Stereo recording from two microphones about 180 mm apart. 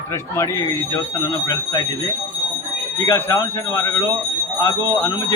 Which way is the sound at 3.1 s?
15° left (ahead or behind).